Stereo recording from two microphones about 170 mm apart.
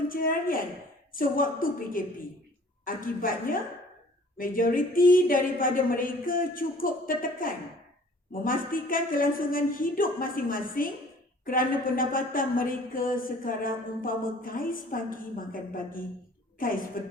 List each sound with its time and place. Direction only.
0.1 s speech: 55° left (ahead or behind)